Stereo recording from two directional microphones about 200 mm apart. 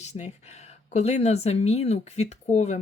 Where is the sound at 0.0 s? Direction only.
35° left (ahead or behind).